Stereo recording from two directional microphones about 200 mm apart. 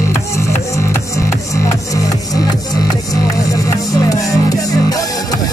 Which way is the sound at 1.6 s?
15° left (ahead or behind).